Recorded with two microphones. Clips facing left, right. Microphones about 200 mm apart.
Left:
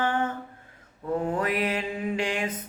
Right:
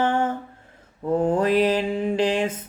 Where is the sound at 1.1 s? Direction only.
30° right (ahead or behind).